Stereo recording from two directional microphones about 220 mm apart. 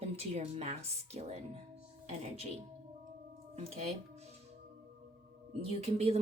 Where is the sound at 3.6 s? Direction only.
30° right (ahead or behind).